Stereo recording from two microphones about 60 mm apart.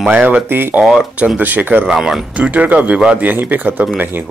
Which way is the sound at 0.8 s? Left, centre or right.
Centre.